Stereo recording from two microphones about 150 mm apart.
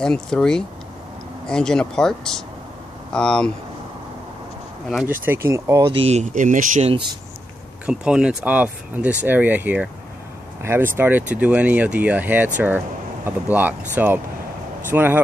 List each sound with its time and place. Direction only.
0.0 s speech: 5° left (ahead or behind)
5.2 s speech: 15° right (ahead or behind)
5.9 s speech: 40° right (ahead or behind)
6.3 s speech: 60° right (ahead or behind)
7.8 s speech: 5° right (ahead or behind)